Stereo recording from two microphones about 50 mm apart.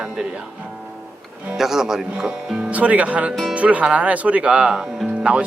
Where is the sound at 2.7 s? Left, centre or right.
Right.